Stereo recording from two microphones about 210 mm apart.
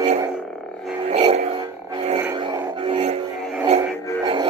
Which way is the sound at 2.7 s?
25° right (ahead or behind).